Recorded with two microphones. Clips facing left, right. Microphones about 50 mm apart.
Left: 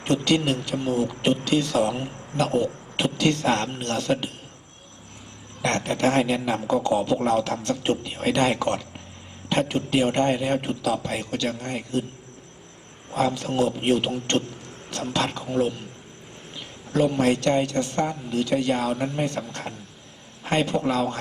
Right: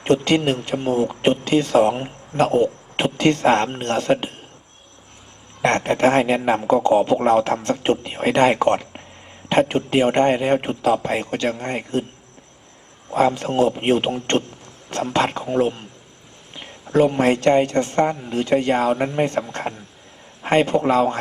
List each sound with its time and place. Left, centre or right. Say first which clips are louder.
0.0 s speech: right 4 dB; right
5.6 s speech: right 6 dB; right
13.1 s speech: right 6 dB; right